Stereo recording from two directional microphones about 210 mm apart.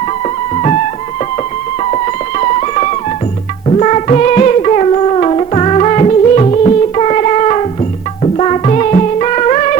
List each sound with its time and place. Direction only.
2.4 s music: 30° left (ahead or behind)